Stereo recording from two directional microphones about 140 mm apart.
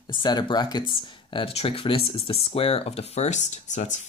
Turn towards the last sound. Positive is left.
turn(degrees=60)  # may be behind; listen again after turning